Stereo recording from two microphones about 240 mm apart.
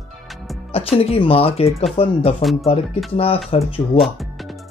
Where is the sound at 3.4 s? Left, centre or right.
Left.